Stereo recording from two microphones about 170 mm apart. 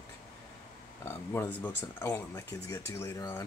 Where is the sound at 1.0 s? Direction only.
10° left (ahead or behind).